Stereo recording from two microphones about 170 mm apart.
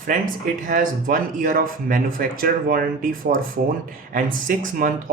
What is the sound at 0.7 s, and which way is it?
Speech, 55° right (ahead or behind).